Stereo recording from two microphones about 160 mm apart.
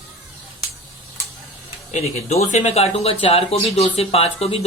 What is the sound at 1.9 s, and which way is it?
Speech, 40° left (ahead or behind).